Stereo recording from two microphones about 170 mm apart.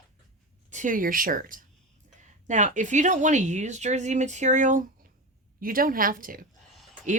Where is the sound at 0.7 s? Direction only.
50° right (ahead or behind).